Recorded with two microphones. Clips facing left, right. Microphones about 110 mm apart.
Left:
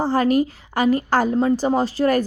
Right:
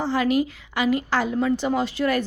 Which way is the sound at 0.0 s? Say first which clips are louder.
Left 4 dB; 40° left (ahead or behind).